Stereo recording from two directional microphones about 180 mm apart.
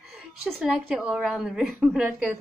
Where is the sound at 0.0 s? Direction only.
Centre (ahead or behind).